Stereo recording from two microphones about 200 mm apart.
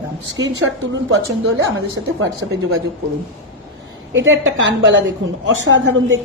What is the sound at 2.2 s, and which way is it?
Speech, 90° right.